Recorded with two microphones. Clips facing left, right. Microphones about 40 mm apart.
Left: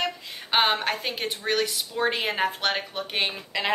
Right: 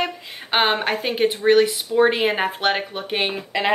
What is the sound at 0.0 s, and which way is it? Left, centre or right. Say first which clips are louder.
Speech: right 3 dB; right.